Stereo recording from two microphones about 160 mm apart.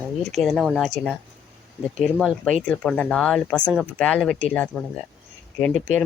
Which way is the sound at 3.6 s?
5° right (ahead or behind).